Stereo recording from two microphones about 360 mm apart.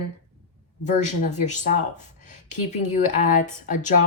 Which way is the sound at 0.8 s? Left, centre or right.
Centre.